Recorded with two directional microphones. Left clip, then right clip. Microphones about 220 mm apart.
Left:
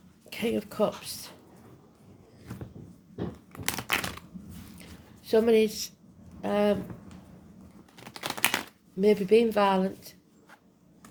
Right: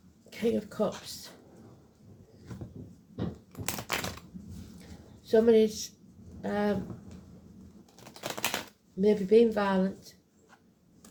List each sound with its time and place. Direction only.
0.3 s speech: 45° left (ahead or behind)
3.6 s typewriter: 30° left (ahead or behind)
4.8 s a sound: 45° left (ahead or behind)
6.4 s speech: 45° left (ahead or behind)
8.1 s typing: 30° left (ahead or behind)
9.0 s speech: 45° left (ahead or behind)